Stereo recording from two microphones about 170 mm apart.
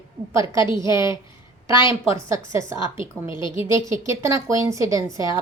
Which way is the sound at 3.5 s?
15° right (ahead or behind).